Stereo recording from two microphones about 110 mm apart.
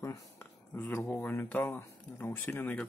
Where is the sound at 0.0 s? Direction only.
25° left (ahead or behind).